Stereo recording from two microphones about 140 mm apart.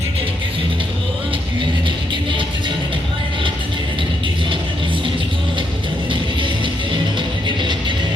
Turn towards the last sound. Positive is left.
turn(degrees=-35)  # may be behind; listen again after turning